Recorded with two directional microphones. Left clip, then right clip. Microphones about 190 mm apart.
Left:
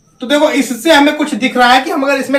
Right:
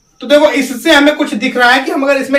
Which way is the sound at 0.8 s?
15° right (ahead or behind).